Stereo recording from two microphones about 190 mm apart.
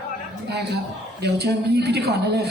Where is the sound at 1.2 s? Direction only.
60° right (ahead or behind).